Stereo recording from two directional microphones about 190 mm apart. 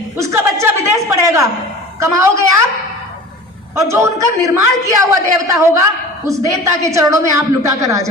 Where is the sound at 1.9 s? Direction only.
15° right (ahead or behind).